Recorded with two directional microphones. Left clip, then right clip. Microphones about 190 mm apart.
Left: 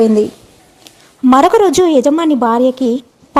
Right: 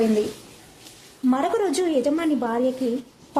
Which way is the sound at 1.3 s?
45° left (ahead or behind).